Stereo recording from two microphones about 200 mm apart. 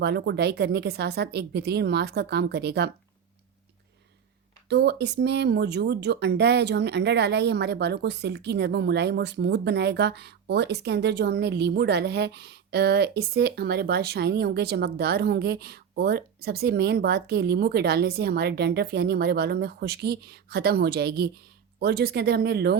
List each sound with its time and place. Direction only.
0.0 s speech: 55° right (ahead or behind)
4.7 s speech: 55° right (ahead or behind)